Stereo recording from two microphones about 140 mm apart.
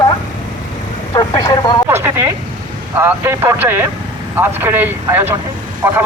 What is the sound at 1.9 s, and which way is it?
A man's voice, 15° right (ahead or behind).